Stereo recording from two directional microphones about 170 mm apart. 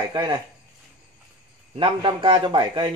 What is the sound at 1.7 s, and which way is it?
A man's voice, 30° right (ahead or behind).